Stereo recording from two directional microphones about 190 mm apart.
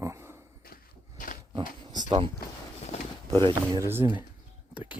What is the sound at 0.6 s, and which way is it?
Walk, 50° left (ahead or behind).